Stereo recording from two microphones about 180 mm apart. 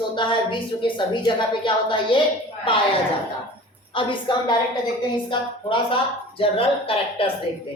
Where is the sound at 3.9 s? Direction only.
25° left (ahead or behind).